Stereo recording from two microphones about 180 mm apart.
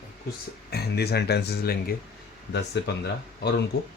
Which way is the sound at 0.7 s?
65° left (ahead or behind).